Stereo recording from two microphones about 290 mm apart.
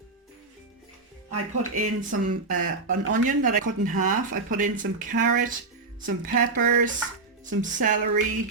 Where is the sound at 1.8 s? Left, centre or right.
Right.